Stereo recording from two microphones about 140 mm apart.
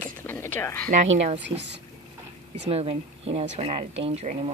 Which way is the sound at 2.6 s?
50° right (ahead or behind).